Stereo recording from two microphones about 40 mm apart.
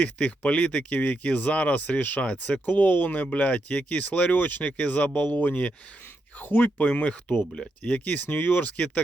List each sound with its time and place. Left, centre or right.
0.0 s speech: left
0.9 s speech: left
1.2 s speech: left
2.6 s speech: left
6.4 s speech: left
7.0 s speech: left
8.3 s speech: left
8.5 s speech: left